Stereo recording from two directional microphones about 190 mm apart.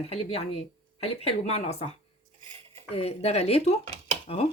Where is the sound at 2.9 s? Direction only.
35° left (ahead or behind).